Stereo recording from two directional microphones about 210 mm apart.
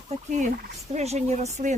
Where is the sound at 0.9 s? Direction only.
30° right (ahead or behind).